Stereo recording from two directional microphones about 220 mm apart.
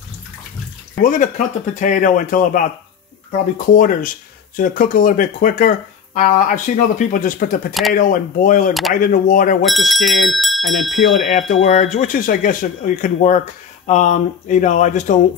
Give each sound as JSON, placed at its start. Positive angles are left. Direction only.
{"t": 1.0, "sound": "speech", "side_deg": 35}
{"t": 9.7, "sound": "speech", "side_deg": 0}
{"t": 11.2, "sound": "speech", "side_deg": 35}